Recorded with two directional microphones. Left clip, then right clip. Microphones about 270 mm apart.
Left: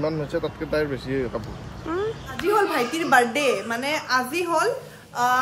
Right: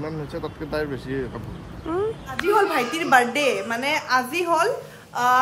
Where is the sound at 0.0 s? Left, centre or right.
Centre.